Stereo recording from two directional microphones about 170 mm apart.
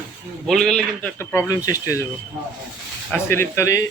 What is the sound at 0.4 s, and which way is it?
Speech, centre (ahead or behind).